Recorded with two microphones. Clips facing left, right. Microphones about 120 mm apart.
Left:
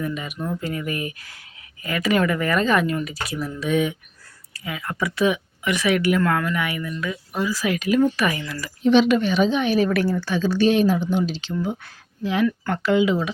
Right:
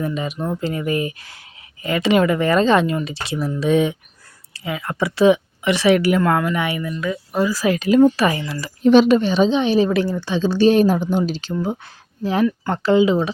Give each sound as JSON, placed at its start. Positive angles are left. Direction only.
{"t": 0.0, "sound": "speech", "side_deg": -30}
{"t": 7.0, "sound": "speech", "side_deg": -40}
{"t": 8.8, "sound": "speech", "side_deg": -45}
{"t": 10.8, "sound": "speech", "side_deg": -45}
{"t": 11.6, "sound": "speech", "side_deg": -30}